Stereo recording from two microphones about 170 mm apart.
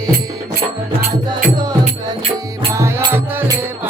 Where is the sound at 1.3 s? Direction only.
25° right (ahead or behind).